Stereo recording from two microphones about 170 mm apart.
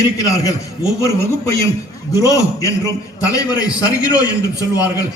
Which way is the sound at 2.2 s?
20° left (ahead or behind).